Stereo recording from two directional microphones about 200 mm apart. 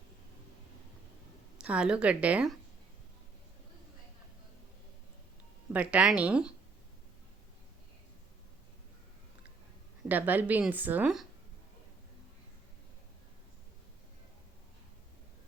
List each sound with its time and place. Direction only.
1.5 s a woman's voice: 5° right (ahead or behind)
5.7 s a woman's voice: 5° right (ahead or behind)
10.1 s a woman's voice: 10° right (ahead or behind)